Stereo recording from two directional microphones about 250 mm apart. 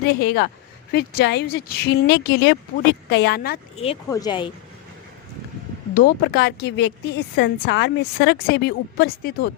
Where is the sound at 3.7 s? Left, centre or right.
Left.